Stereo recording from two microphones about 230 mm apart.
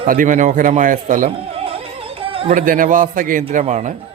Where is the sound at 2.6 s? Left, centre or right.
Right.